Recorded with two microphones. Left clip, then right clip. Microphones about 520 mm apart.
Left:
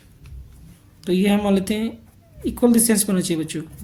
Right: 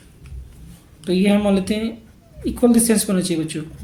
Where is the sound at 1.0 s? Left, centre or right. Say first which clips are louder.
Right 2 dB; left.